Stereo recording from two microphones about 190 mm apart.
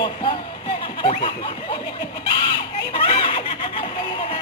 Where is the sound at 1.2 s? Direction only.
25° left (ahead or behind).